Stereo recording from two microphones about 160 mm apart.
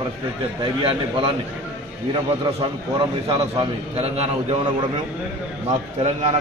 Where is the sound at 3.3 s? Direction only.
35° right (ahead or behind).